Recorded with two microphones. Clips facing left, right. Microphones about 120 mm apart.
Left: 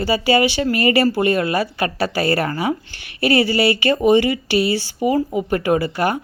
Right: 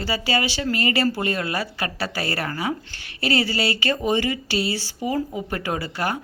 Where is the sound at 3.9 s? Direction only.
15° left (ahead or behind).